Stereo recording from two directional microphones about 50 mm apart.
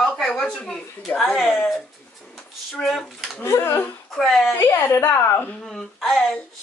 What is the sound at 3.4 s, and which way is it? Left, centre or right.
A woman's voice, left.